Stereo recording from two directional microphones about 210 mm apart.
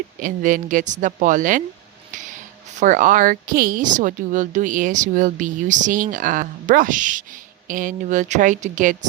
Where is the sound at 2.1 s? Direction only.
35° right (ahead or behind).